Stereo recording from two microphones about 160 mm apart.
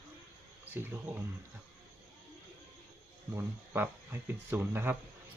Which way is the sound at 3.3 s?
15° right (ahead or behind).